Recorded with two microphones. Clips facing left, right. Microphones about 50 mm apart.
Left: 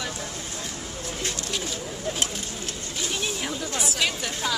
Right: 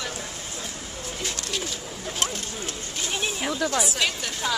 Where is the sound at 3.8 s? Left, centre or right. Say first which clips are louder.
Right 1 dB; centre.